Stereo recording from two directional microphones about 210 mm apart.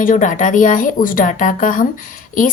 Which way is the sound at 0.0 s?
40° left (ahead or behind).